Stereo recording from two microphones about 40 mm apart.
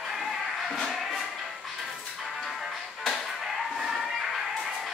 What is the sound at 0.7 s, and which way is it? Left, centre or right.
Music, centre.